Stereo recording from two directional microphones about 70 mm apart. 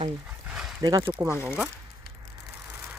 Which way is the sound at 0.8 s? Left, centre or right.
Right.